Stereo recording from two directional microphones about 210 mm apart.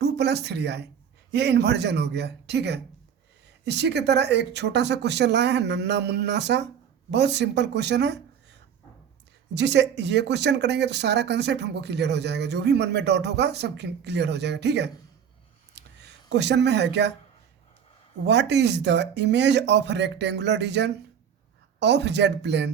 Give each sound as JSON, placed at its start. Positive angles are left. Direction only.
{"t": 0.0, "sound": "speech", "side_deg": -50}
{"t": 9.6, "sound": "speech", "side_deg": -55}
{"t": 15.8, "sound": "a sound", "side_deg": -55}
{"t": 16.3, "sound": "speech", "side_deg": -55}
{"t": 18.3, "sound": "speech", "side_deg": -55}